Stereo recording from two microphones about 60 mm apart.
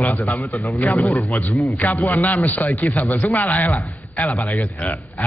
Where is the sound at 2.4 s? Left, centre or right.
Left.